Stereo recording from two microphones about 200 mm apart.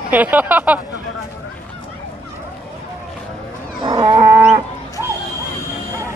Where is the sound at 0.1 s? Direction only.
10° right (ahead or behind).